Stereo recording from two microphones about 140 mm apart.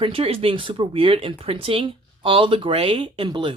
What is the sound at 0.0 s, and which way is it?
Speech, 40° right (ahead or behind).